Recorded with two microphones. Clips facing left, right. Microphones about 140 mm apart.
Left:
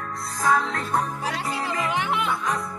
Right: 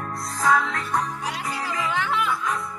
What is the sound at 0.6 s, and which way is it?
Music, 30° left (ahead or behind).